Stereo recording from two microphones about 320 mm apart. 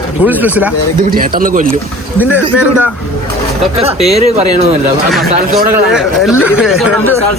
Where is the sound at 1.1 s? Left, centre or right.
Right.